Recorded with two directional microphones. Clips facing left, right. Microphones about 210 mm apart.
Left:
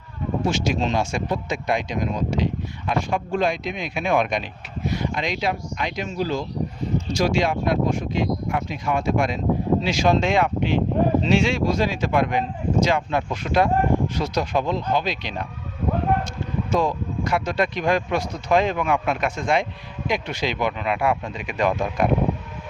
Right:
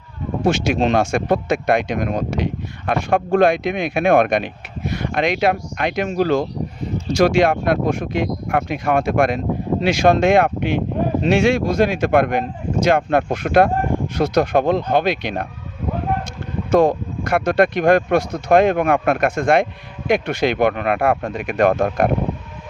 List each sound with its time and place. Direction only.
0.4 s speech: 60° right (ahead or behind)
16.7 s speech: 60° right (ahead or behind)